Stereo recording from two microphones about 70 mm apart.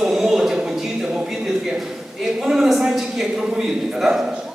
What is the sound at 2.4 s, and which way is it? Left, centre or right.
A man's voice, centre.